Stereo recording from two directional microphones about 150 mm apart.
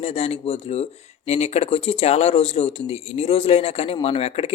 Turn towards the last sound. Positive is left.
turn(degrees=40)  # may be behind; listen again after turning